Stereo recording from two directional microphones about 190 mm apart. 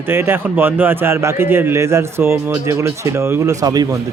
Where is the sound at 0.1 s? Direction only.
10° right (ahead or behind).